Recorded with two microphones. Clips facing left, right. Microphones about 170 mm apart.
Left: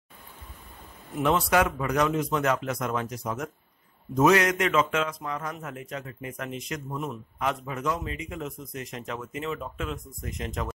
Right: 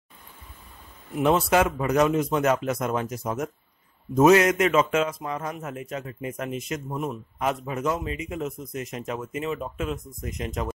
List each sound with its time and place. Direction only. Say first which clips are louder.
1.2 s speech: right 3 dB; 25° right (ahead or behind)